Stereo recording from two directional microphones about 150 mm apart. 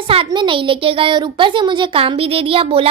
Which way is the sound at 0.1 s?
35° right (ahead or behind).